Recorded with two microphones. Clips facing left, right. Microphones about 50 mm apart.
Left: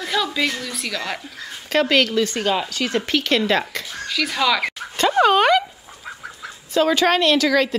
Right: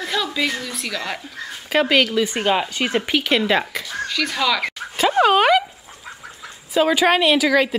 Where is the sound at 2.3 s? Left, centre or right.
Centre.